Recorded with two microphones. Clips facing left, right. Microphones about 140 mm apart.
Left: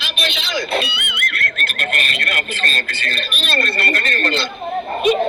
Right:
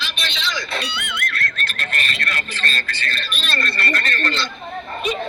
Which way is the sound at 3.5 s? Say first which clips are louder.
Left 3 dB; 55° left (ahead or behind).